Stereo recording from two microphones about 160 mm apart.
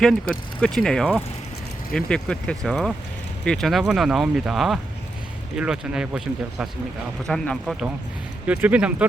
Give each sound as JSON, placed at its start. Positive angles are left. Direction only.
{"t": 0.0, "sound": "speech", "side_deg": 5}